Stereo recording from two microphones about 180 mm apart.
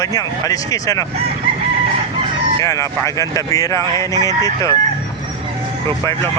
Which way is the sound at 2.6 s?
15° left (ahead or behind).